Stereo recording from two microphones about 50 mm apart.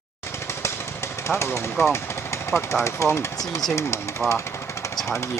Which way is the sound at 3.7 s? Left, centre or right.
Left.